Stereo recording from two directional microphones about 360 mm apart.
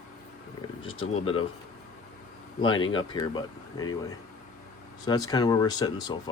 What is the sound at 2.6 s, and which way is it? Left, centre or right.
Speech, centre.